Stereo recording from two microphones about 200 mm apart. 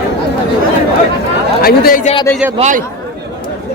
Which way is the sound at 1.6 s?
50° left (ahead or behind).